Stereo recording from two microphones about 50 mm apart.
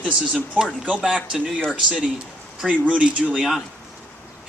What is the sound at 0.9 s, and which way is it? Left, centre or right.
Speech, centre.